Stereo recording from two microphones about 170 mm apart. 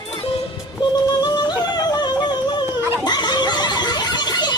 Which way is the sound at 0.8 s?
25° left (ahead or behind).